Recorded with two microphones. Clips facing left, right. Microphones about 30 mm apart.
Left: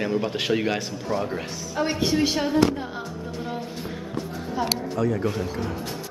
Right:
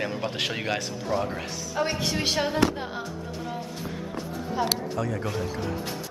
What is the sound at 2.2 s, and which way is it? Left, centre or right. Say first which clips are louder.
Speech: left 3 dB; centre.